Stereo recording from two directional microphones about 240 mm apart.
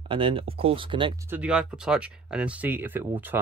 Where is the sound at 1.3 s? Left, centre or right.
Centre.